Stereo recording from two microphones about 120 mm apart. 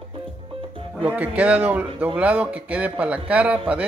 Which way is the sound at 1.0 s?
10° right (ahead or behind).